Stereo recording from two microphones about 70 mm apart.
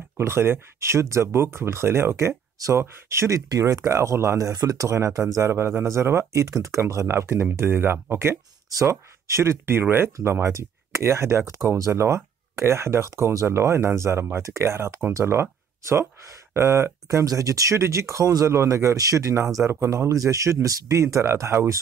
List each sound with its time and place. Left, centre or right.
0.2 s speech: right
4.6 s speech: right
6.3 s speech: right